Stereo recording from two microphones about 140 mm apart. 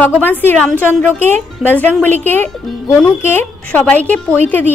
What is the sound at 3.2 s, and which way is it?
A woman's voice, 15° left (ahead or behind).